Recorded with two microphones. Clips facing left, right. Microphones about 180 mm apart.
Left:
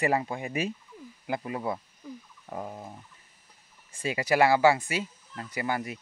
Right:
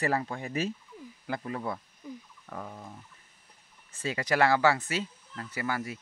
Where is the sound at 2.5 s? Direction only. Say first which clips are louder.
Left 4 dB; 25° left (ahead or behind).